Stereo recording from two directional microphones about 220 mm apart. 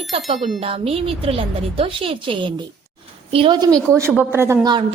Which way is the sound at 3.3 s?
20° right (ahead or behind).